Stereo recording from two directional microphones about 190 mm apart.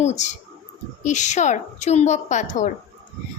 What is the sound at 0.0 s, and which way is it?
A woman's voice, 35° left (ahead or behind).